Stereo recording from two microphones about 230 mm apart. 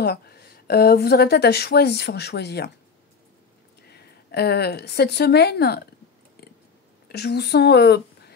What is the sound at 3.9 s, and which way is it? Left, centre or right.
A woman's voice, left.